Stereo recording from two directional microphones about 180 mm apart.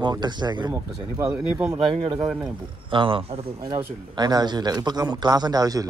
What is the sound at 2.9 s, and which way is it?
Speech, 30° right (ahead or behind).